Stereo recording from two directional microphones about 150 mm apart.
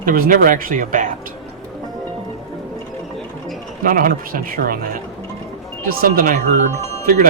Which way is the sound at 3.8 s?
65° right (ahead or behind).